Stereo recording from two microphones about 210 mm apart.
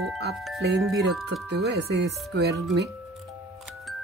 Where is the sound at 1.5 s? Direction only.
55° right (ahead or behind).